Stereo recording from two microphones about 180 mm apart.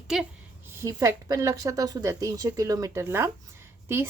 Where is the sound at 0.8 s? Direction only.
15° right (ahead or behind).